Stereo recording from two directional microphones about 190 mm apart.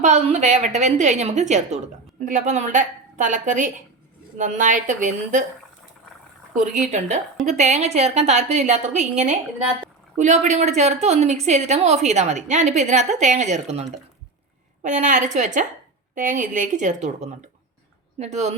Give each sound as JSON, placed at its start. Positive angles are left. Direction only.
{"t": 0.0, "sound": "a woman's voice", "side_deg": -35}
{"t": 6.5, "sound": "a woman's voice", "side_deg": -40}